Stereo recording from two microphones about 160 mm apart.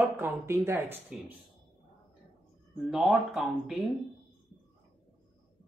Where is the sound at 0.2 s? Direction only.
15° right (ahead or behind).